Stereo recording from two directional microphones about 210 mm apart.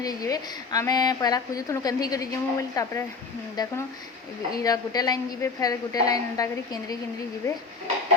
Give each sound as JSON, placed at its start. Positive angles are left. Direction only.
{"t": 0.0, "sound": "a woman's voice", "side_deg": 15}
{"t": 4.6, "sound": "a woman's voice", "side_deg": 20}